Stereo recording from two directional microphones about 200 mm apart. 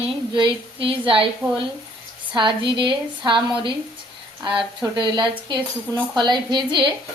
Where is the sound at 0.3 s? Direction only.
25° right (ahead or behind).